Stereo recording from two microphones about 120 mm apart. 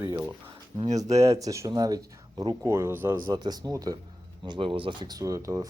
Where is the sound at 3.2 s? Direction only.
35° right (ahead or behind).